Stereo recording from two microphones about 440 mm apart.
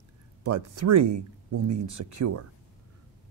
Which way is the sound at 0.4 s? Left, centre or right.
Right.